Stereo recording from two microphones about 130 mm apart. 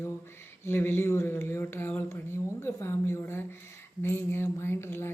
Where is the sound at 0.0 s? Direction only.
20° left (ahead or behind).